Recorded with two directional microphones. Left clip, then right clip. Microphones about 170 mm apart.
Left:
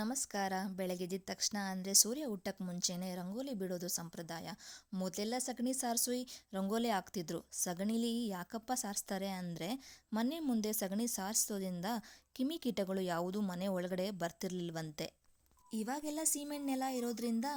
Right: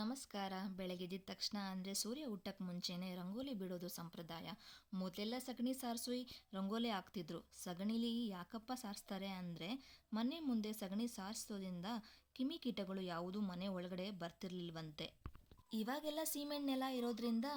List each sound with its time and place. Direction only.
0.0 s a woman's voice: 55° left (ahead or behind)
15.7 s speech: 20° left (ahead or behind)